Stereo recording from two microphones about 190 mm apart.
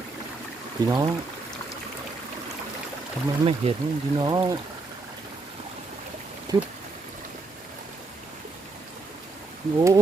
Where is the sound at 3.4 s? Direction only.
30° right (ahead or behind).